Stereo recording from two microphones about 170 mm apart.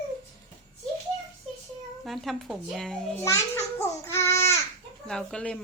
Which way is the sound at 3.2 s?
15° left (ahead or behind).